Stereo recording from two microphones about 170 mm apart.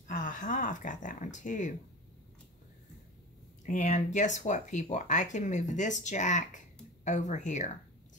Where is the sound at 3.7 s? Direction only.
45° left (ahead or behind).